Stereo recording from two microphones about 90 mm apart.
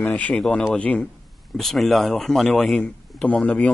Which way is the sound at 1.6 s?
5° left (ahead or behind).